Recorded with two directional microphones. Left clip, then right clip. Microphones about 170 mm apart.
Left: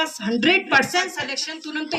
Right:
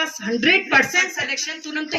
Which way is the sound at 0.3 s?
35° left (ahead or behind).